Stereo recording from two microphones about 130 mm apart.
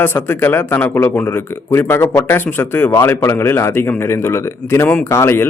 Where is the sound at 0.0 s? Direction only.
15° left (ahead or behind).